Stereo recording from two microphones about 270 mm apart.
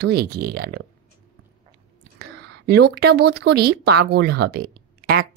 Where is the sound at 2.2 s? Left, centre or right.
Right.